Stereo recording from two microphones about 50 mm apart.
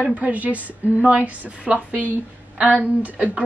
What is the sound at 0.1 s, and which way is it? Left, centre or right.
A woman's voice, right.